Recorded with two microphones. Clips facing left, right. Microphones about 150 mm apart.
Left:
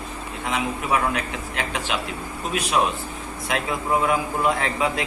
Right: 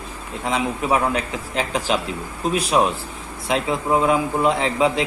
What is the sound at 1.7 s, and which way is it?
A man's voice, 35° right (ahead or behind).